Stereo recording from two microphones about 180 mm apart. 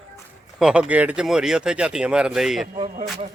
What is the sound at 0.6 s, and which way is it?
Speech, 5° right (ahead or behind).